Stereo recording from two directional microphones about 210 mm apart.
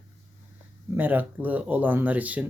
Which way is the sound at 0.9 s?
10° right (ahead or behind).